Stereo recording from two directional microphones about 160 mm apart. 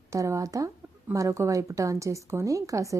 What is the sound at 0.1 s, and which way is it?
A woman's voice, 20° right (ahead or behind).